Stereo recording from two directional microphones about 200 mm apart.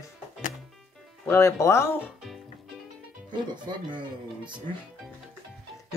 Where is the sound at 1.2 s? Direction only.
15° left (ahead or behind).